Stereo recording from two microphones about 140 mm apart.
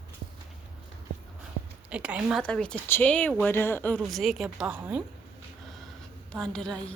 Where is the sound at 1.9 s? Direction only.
10° right (ahead or behind).